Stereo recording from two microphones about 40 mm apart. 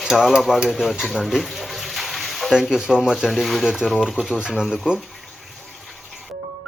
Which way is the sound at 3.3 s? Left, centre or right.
Centre.